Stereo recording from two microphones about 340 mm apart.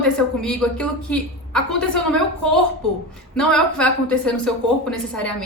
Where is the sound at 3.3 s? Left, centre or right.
Centre.